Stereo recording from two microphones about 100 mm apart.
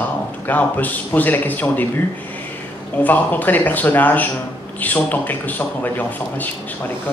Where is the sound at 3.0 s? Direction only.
15° left (ahead or behind).